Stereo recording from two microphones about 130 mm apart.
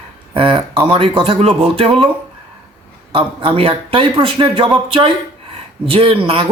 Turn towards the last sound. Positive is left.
turn(degrees=-45)  # may be behind; listen again after turning